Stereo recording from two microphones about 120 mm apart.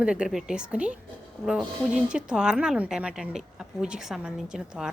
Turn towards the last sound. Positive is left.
turn(degrees=-5)  # may be behind; listen again after turning